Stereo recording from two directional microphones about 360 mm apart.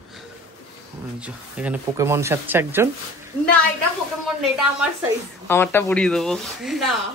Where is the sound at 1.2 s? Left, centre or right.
Centre.